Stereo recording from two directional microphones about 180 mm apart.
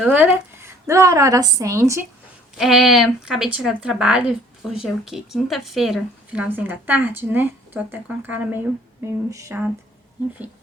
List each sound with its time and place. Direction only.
0.0 s a woman's voice: 10° right (ahead or behind)
2.6 s a woman's voice: centre (ahead or behind)